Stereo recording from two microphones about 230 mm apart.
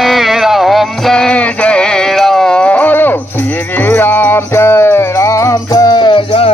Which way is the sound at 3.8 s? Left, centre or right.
Centre.